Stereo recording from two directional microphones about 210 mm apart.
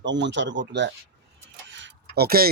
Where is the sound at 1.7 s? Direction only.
60° right (ahead or behind).